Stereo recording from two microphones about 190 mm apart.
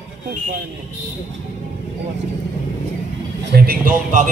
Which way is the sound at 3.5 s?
50° right (ahead or behind).